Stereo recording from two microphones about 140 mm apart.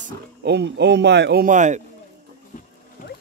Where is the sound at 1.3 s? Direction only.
70° right (ahead or behind).